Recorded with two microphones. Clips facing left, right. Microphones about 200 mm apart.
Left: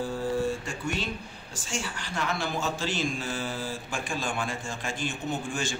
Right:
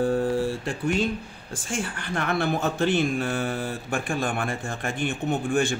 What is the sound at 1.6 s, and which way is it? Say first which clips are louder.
Speech: right 4 dB; 55° right (ahead or behind).